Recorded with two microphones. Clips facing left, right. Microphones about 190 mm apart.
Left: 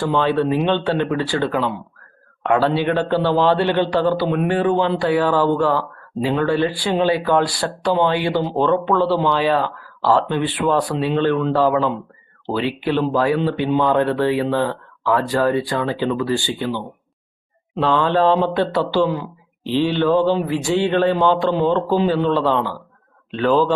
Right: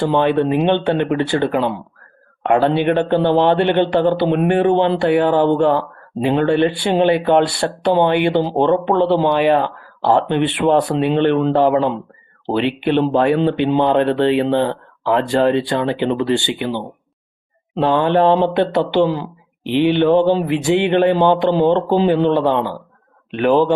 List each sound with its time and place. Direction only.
0.0 s a man's voice: 20° right (ahead or behind)
19.6 s a man's voice: 20° right (ahead or behind)